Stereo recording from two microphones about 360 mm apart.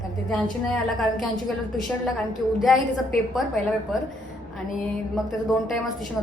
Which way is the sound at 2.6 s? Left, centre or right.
Centre.